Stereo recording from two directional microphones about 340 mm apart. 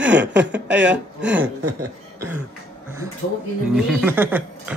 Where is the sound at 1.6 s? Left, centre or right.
Right.